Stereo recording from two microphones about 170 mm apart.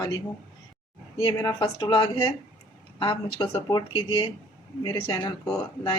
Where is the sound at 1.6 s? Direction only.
30° left (ahead or behind).